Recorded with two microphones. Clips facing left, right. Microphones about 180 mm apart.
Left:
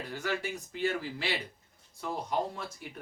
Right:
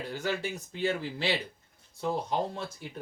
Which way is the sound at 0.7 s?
25° right (ahead or behind).